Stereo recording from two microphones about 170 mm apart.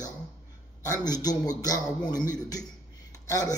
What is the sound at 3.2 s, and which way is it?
Speech, 20° left (ahead or behind).